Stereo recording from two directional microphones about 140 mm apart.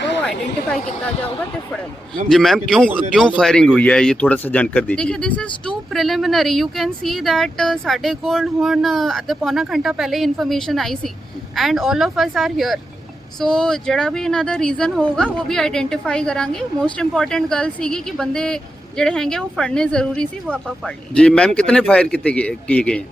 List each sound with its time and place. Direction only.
0.2 s a woman's voice: 5° left (ahead or behind)
2.3 s a man's voice: centre (ahead or behind)